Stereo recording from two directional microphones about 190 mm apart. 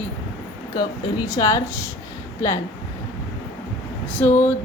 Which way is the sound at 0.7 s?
20° left (ahead or behind).